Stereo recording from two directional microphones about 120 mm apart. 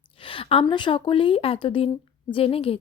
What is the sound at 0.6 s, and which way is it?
A woman's voice, 40° left (ahead or behind).